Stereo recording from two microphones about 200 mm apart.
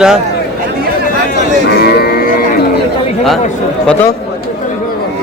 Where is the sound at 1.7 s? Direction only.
50° left (ahead or behind).